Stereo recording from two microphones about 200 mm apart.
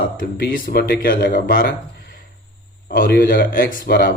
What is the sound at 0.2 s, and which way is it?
Speech, 45° left (ahead or behind).